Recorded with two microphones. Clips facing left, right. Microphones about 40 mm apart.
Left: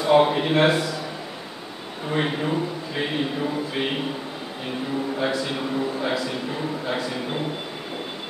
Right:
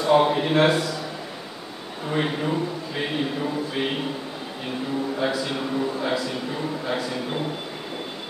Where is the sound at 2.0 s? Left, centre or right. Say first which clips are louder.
Even; centre.